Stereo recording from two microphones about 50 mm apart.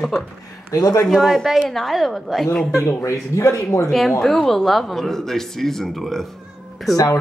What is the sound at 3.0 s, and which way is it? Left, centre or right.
Speech, left.